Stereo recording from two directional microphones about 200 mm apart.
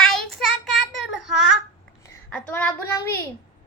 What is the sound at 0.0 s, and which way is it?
Child singing, centre (ahead or behind).